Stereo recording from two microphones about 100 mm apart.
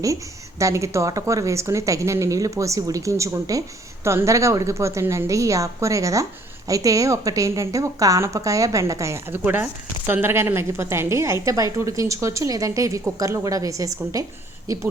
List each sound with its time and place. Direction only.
0.6 s a woman's voice: 30° right (ahead or behind)